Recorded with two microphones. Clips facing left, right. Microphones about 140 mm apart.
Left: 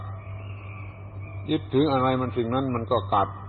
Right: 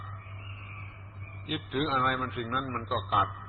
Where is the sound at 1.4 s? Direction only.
35° left (ahead or behind).